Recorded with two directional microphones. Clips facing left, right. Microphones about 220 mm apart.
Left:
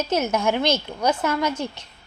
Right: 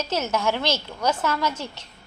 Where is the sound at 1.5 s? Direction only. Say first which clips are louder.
Left 5 dB; 55° left (ahead or behind).